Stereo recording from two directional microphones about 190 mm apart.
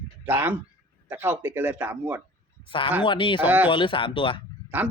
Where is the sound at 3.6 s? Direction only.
25° left (ahead or behind).